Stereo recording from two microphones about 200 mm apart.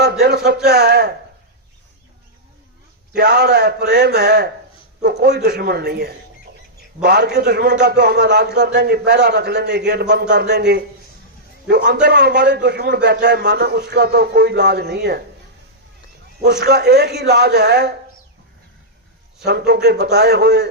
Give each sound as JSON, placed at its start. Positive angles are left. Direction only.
{"t": 0.0, "sound": "speech", "side_deg": -55}
{"t": 3.2, "sound": "a man's voice", "side_deg": -55}
{"t": 16.4, "sound": "a man's voice", "side_deg": -55}
{"t": 19.5, "sound": "speech", "side_deg": -55}